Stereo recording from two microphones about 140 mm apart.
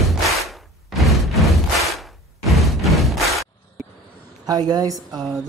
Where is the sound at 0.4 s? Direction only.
Centre (ahead or behind).